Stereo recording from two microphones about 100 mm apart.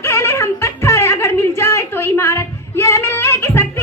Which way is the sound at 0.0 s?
25° left (ahead or behind).